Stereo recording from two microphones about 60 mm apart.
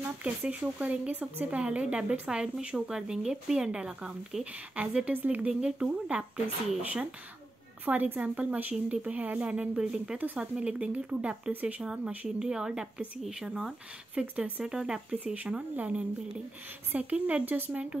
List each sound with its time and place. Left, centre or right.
0.2 s speech: right
5.5 s speech: centre
10.1 s speech: right